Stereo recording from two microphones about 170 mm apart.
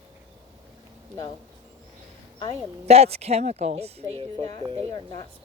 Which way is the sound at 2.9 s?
40° right (ahead or behind).